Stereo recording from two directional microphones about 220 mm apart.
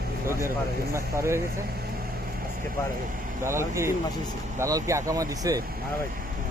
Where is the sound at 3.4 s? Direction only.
10° right (ahead or behind).